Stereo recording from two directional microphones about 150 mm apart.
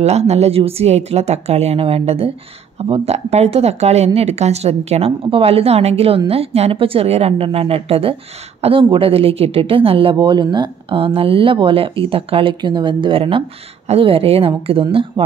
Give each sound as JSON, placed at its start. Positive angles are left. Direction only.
{"t": 0.0, "sound": "a woman's voice", "side_deg": -45}